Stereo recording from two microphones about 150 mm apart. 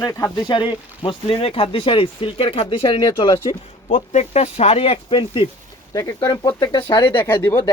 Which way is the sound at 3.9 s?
60° left (ahead or behind).